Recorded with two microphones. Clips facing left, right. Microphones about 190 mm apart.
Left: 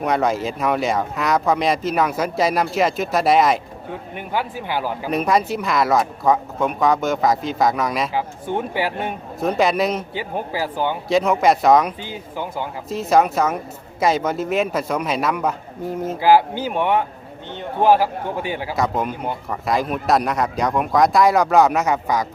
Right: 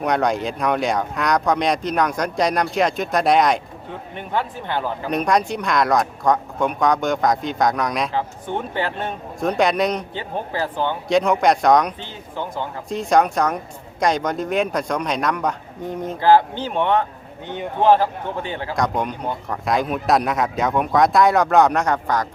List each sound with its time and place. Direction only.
0.0 s speech: centre (ahead or behind)